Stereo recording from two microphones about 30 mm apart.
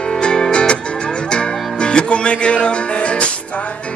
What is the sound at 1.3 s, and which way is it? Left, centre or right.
Music, left.